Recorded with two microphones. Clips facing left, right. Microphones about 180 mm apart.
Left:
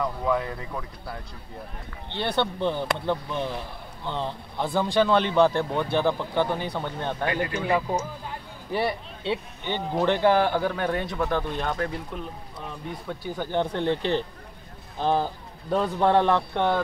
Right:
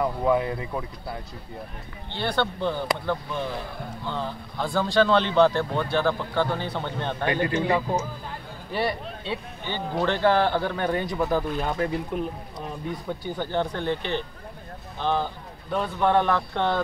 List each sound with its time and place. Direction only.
0.0 s speech: 20° right (ahead or behind)
2.1 s speech: 20° left (ahead or behind)
4.0 s a man's voice: 25° left (ahead or behind)
7.5 s speech: 25° right (ahead or behind)
8.7 s speech: 25° left (ahead or behind); by 12.6 s 15° right (ahead or behind)
13.2 s a man's voice: 10° left (ahead or behind)
13.7 s a man's voice: 30° left (ahead or behind)
16.5 s a man's voice: 10° left (ahead or behind)